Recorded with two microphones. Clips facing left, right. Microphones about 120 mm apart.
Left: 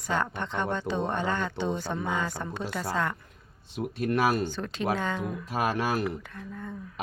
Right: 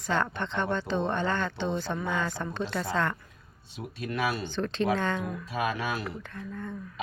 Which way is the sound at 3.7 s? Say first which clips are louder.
Left 6 dB; 50° left (ahead or behind).